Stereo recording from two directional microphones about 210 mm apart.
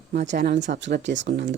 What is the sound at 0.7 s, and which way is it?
Speech, 55° right (ahead or behind).